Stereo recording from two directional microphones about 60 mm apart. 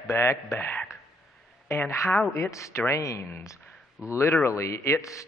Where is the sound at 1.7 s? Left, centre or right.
Left.